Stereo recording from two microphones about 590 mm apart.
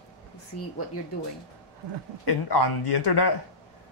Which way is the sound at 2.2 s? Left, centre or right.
Left.